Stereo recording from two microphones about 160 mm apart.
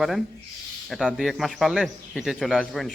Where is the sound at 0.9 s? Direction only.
Centre (ahead or behind).